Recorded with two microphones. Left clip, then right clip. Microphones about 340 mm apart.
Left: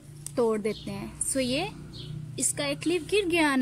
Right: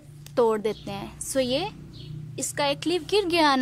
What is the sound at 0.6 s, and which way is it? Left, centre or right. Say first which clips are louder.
Speech: right 3 dB; right.